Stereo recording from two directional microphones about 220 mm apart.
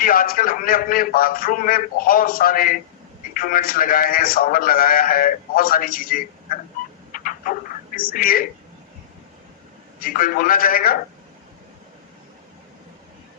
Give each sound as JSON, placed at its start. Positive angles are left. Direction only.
{"t": 0.0, "sound": "a man's voice", "side_deg": 40}
{"t": 7.1, "sound": "a sound", "side_deg": 40}
{"t": 7.9, "sound": "a man's voice", "side_deg": 40}
{"t": 10.0, "sound": "a man's voice", "side_deg": 40}